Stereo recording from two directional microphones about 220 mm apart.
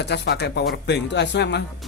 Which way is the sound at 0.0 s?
50° left (ahead or behind).